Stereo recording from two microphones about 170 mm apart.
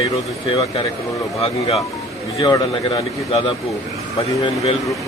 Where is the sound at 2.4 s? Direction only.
30° left (ahead or behind).